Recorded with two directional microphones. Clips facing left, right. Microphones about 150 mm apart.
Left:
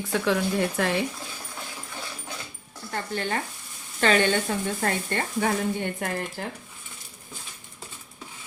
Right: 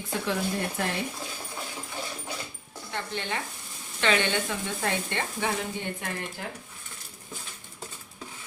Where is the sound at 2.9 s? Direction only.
45° left (ahead or behind).